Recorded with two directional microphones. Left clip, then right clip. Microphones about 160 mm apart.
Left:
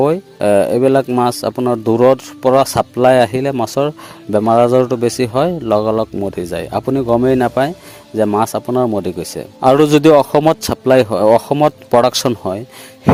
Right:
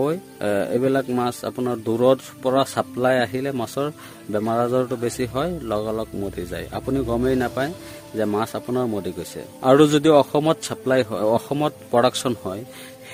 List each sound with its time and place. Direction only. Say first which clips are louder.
0.0 s speech: left 10 dB; 40° left (ahead or behind)
12.3 s speech: left 8 dB; 25° left (ahead or behind)